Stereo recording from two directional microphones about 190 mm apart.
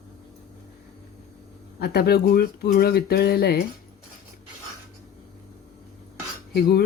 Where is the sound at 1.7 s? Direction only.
55° left (ahead or behind).